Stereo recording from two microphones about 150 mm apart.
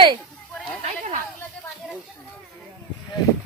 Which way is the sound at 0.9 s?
60° right (ahead or behind).